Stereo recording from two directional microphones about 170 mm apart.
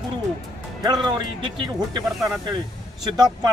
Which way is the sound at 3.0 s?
25° right (ahead or behind).